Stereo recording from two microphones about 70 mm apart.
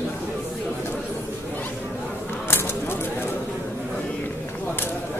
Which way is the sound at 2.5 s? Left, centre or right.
Left.